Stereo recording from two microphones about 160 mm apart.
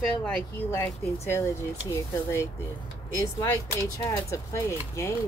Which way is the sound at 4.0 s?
20° left (ahead or behind).